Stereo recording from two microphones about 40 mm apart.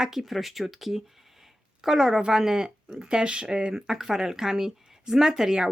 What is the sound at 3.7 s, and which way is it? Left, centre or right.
Speech, centre.